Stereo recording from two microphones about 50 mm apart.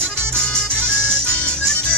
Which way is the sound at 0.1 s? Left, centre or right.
Centre.